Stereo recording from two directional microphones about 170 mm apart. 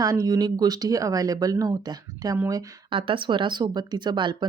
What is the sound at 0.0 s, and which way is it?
Speech, 20° right (ahead or behind).